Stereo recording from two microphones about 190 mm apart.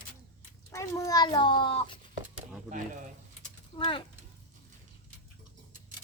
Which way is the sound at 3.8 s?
25° left (ahead or behind).